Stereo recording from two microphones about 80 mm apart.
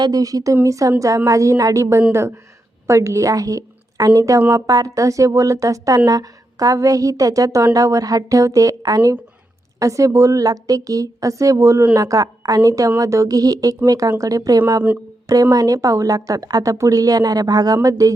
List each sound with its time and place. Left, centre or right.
0.0 s a woman's voice: right